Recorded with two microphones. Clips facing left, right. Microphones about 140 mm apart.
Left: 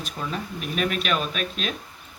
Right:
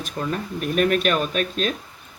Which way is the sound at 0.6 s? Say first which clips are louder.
Right 7 dB; 45° right (ahead or behind).